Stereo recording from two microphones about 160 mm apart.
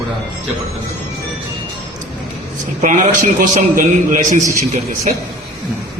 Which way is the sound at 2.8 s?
50° right (ahead or behind).